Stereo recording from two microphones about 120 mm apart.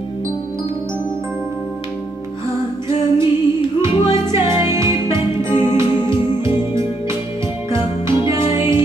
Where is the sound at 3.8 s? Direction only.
25° right (ahead or behind).